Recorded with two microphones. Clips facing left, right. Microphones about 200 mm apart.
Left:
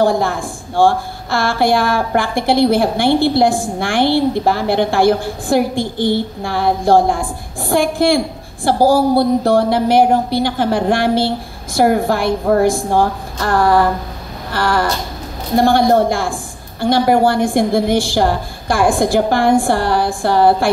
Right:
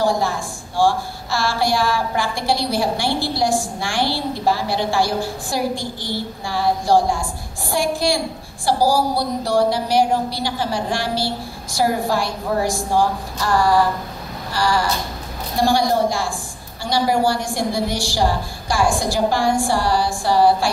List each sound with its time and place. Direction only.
0.0 s a woman's voice: 55° left (ahead or behind)